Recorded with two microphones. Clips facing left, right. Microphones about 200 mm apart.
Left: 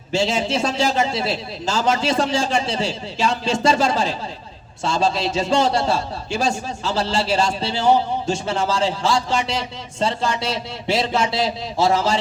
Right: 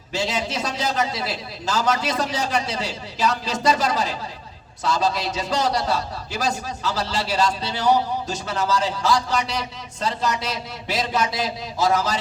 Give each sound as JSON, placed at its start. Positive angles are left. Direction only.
{"t": 0.1, "sound": "a man's voice", "side_deg": 25}